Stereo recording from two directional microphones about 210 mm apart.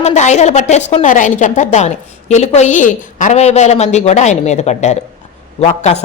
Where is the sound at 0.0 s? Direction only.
35° left (ahead or behind).